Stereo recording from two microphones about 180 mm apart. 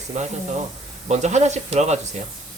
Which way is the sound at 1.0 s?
40° right (ahead or behind).